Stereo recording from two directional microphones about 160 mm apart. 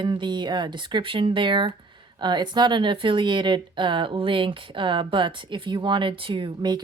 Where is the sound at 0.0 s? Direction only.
30° right (ahead or behind).